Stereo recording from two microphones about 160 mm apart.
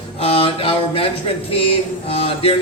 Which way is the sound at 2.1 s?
35° left (ahead or behind).